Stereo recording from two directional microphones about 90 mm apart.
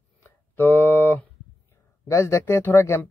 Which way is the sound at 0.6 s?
20° left (ahead or behind).